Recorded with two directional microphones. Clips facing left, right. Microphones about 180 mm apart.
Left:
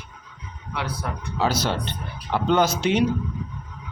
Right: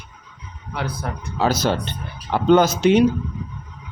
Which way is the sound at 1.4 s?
45° right (ahead or behind).